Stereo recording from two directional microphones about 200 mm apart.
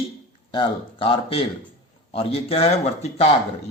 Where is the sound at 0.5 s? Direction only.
25° left (ahead or behind).